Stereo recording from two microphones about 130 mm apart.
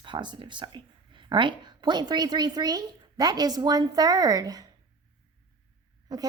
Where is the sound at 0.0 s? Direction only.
35° right (ahead or behind).